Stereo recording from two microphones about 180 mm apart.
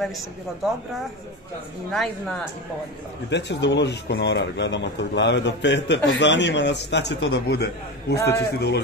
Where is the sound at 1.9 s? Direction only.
Centre (ahead or behind).